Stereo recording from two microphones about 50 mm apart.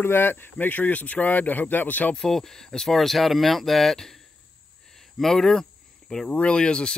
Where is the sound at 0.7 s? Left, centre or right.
Left.